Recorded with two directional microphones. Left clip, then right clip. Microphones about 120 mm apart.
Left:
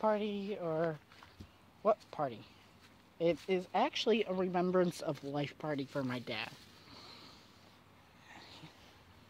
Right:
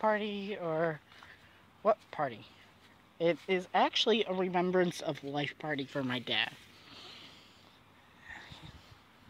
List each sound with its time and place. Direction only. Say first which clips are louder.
0.0 s a woman's voice: right 2 dB; 5° right (ahead or behind); by 0.9 s 25° right (ahead or behind)
1.9 s speech: right 2 dB; 5° left (ahead or behind); by 5.9 s 25° left (ahead or behind)
5.9 s speech: right 6 dB; 5° right (ahead or behind)
6.9 s vehicle: right 4 dB; 20° left (ahead or behind)
8.3 s whispering: right 5 dB; 15° left (ahead or behind)